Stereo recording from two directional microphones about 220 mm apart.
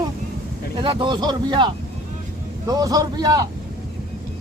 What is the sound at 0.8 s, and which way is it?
A man's voice, 20° right (ahead or behind).